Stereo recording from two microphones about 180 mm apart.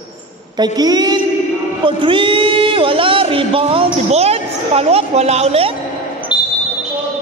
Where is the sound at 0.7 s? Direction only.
20° right (ahead or behind).